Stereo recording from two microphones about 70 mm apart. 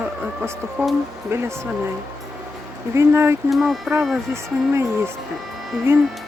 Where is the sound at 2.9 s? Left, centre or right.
Right.